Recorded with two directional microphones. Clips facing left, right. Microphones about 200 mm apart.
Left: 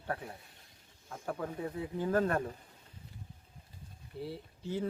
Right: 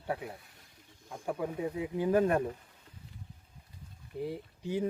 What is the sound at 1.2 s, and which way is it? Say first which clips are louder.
Speech: right 4 dB; 15° right (ahead or behind).